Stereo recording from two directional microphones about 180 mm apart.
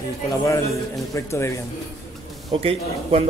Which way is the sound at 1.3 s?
15° left (ahead or behind).